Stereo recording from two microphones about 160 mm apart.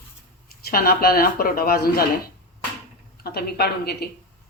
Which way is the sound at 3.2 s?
75° left (ahead or behind).